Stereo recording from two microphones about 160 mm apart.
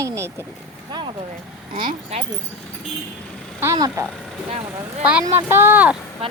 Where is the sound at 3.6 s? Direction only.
15° right (ahead or behind).